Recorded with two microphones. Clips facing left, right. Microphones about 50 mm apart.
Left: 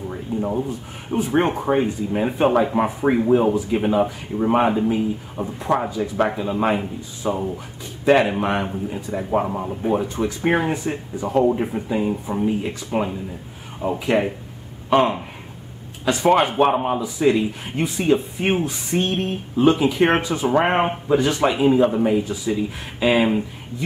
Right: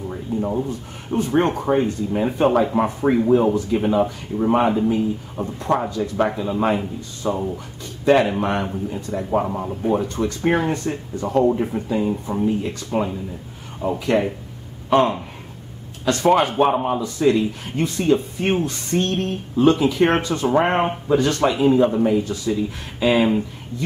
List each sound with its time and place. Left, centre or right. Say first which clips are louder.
0.4 s speech: even; centre